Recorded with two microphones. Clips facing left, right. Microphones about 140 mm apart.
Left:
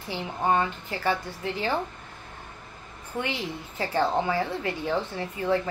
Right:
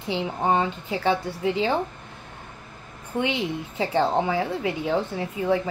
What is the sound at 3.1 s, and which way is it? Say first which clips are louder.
A woman's voice: right 6 dB; 20° right (ahead or behind).